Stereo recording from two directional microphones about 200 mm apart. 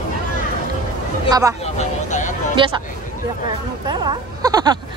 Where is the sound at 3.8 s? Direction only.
20° right (ahead or behind).